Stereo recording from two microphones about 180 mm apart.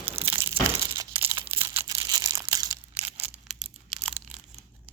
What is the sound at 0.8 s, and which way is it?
Crumpling, 30° right (ahead or behind).